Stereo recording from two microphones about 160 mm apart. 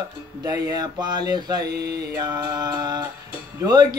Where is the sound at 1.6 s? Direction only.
90° right.